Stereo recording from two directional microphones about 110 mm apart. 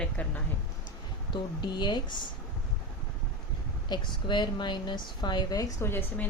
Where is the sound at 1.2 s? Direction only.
45° left (ahead or behind).